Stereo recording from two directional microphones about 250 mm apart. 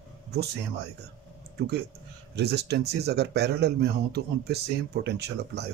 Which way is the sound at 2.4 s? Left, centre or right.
Right.